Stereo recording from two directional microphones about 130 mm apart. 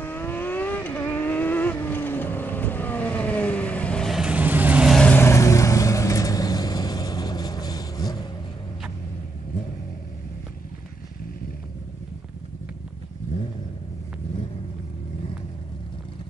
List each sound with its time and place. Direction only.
0.0 s vehicle: 15° left (ahead or behind)
4.2 s vehicle: 10° right (ahead or behind)
4.9 s vehicle: 5° left (ahead or behind)
5.2 s vehicle: 20° left (ahead or behind)